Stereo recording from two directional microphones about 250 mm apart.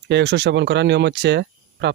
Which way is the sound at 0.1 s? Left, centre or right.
Right.